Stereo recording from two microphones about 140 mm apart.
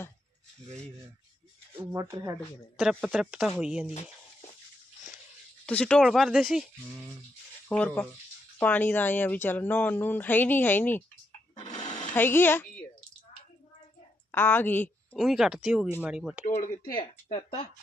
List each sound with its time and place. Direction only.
1.7 s speech: 20° right (ahead or behind)
2.4 s speech: centre (ahead or behind)
5.6 s speech: 5° left (ahead or behind)
7.7 s speech: 10° left (ahead or behind)
11.6 s sewing machine: 30° left (ahead or behind)
12.1 s speech: 15° left (ahead or behind)
14.3 s speech: 15° left (ahead or behind)
15.1 s speech: centre (ahead or behind)
16.6 s speech: 65° left (ahead or behind)
17.3 s speech: 45° left (ahead or behind)